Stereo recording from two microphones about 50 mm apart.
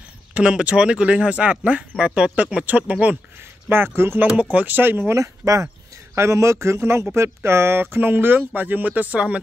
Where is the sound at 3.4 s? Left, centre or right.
Right.